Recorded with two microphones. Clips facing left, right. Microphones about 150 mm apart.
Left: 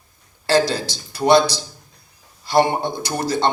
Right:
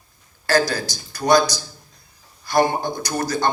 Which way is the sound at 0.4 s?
25° left (ahead or behind).